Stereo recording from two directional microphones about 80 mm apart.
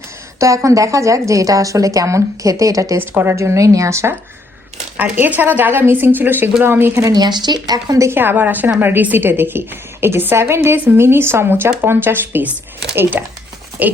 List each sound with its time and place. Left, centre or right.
0.3 s a woman's voice: right
4.9 s a woman's voice: right
7.0 s a woman's voice: right
8.0 s a woman's voice: right